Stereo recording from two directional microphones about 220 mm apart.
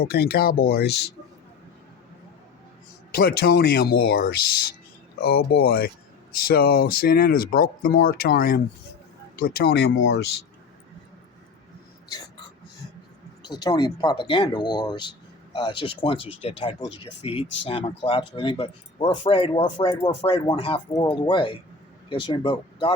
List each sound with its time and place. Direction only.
0.0 s speech: 45° left (ahead or behind)
3.2 s speech: 45° left (ahead or behind)
13.4 s speech: 20° left (ahead or behind)